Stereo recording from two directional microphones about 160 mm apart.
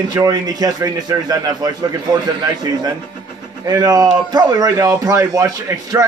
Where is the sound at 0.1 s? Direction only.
25° right (ahead or behind).